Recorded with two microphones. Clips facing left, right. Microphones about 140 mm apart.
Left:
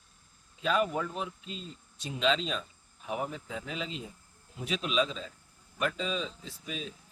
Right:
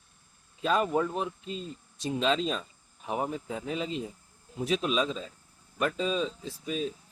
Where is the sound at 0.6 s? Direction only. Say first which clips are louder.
Right 3 dB; 40° right (ahead or behind).